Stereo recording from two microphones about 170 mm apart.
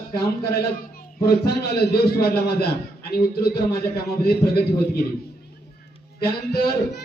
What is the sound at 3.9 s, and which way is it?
A man's voice, 65° left (ahead or behind).